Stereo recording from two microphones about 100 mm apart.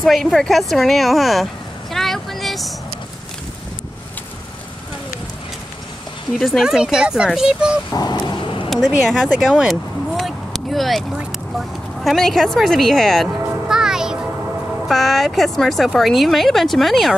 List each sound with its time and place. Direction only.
0.0 s speech: centre (ahead or behind)
6.3 s speech: centre (ahead or behind)
7.9 s speech: 40° left (ahead or behind)
9.1 s vehicle: 5° left (ahead or behind)
11.1 s a sound: centre (ahead or behind)
14.9 s speech: centre (ahead or behind)